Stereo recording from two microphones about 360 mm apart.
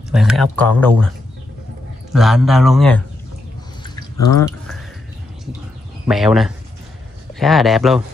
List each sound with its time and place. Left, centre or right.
0.1 s speech: centre
2.1 s speech: centre
3.8 s drip: centre
6.0 s speech: centre